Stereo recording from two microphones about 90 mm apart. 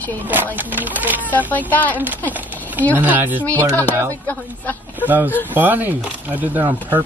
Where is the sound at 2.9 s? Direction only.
20° right (ahead or behind).